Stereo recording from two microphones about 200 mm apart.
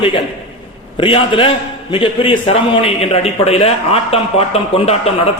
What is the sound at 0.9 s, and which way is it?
A man's voice, 25° left (ahead or behind).